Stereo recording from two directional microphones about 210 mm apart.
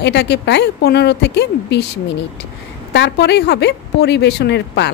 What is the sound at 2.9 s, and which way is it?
A woman's voice, 55° left (ahead or behind).